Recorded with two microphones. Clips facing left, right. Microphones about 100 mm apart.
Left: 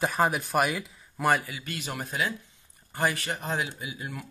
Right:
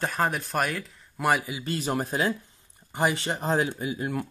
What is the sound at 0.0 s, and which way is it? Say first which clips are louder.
Speech: left 1 dB; 5° left (ahead or behind).